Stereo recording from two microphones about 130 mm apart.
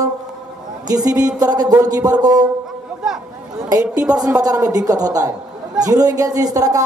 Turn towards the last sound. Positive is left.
turn(degrees=-25)  # may be behind; listen again after turning